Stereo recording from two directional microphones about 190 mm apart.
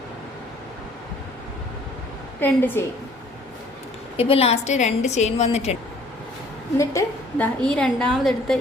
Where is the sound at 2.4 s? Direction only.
10° left (ahead or behind).